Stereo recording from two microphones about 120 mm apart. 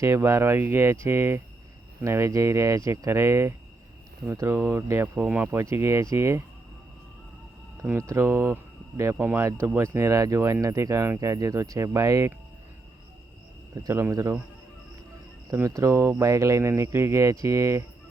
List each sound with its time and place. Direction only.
0.0 s speech: 25° right (ahead or behind)
7.9 s speech: 20° right (ahead or behind)
13.8 s speech: 25° right (ahead or behind)
15.5 s speech: 25° right (ahead or behind)